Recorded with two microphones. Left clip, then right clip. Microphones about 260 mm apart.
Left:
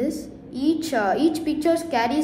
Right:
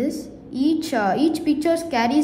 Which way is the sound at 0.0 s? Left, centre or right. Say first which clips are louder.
Right 1 dB; right.